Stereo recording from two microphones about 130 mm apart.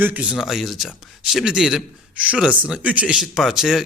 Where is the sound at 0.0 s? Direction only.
10° right (ahead or behind).